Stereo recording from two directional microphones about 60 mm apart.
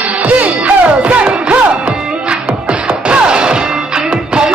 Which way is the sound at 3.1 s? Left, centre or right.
Centre.